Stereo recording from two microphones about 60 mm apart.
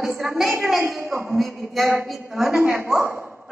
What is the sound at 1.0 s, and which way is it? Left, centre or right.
Speech, right.